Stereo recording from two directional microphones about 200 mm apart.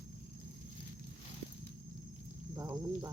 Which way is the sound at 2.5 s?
15° right (ahead or behind).